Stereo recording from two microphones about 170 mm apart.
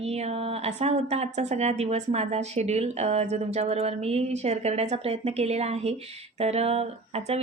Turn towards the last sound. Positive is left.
turn(degrees=-40)  # may be behind; listen again after turning